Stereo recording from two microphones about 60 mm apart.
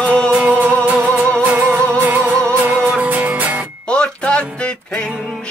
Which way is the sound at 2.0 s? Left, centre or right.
Right.